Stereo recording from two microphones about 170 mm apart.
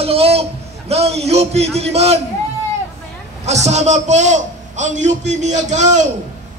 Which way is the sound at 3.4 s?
40° right (ahead or behind).